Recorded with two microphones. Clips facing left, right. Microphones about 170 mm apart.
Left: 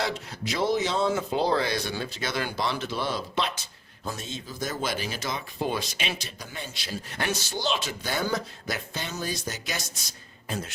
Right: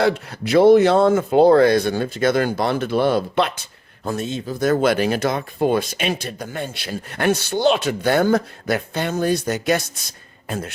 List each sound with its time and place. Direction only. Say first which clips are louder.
0.0 s speech: right 11 dB; 60° right (ahead or behind)